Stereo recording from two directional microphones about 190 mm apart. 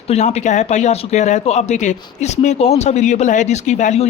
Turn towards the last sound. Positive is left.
turn(degrees=35)  # may be behind; listen again after turning